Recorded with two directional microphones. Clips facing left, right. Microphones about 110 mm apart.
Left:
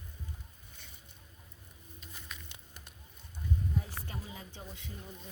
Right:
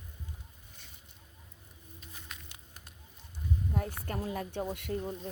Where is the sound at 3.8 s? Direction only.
55° right (ahead or behind).